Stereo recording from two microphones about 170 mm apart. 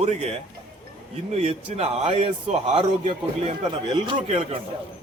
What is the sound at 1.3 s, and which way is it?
A man's voice, 35° right (ahead or behind).